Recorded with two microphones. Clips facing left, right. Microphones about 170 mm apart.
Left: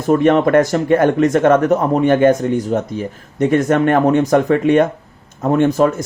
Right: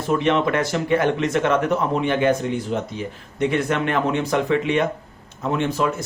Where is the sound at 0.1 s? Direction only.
45° left (ahead or behind).